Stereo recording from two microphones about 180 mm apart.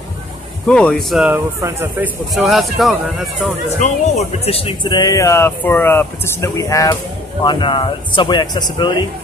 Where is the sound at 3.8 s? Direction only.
35° left (ahead or behind).